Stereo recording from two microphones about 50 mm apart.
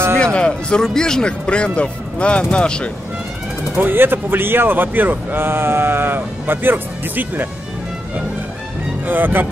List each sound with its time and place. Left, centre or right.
0.2 s speech: centre
3.7 s speech: right
9.0 s speech: right